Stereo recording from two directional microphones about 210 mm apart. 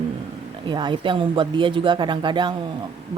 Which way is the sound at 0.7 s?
20° right (ahead or behind).